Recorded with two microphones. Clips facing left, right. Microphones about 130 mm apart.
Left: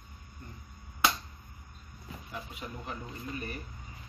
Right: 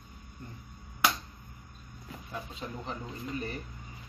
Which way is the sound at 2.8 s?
25° right (ahead or behind).